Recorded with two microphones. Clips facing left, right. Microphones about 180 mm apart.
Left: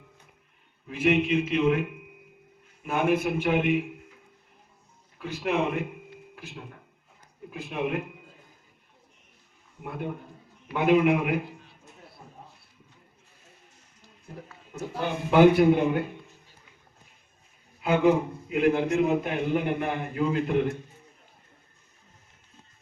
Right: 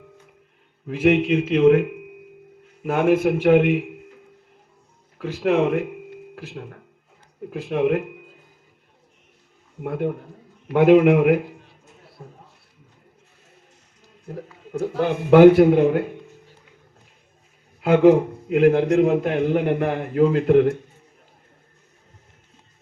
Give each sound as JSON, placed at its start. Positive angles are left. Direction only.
{"t": 1.1, "sound": "speech", "side_deg": -80}
{"t": 2.8, "sound": "speech", "side_deg": -85}
{"t": 5.1, "sound": "a man's voice", "side_deg": -70}
{"t": 9.8, "sound": "a man's voice", "side_deg": -60}
{"t": 14.3, "sound": "a man's voice", "side_deg": -65}
{"t": 17.7, "sound": "a man's voice", "side_deg": -65}